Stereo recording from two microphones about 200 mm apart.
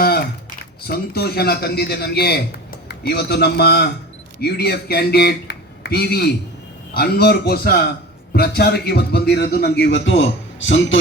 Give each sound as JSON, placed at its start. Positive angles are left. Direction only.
{"t": 0.9, "sound": "a man's voice", "side_deg": 50}